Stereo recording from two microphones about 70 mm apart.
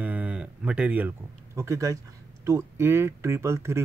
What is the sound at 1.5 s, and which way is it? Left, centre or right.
Speech, right.